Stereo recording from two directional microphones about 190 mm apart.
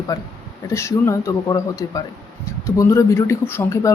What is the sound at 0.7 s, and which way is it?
Speech, 15° left (ahead or behind).